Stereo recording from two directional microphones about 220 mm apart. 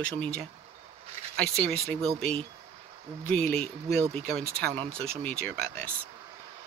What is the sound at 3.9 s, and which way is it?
Speech, 25° right (ahead or behind).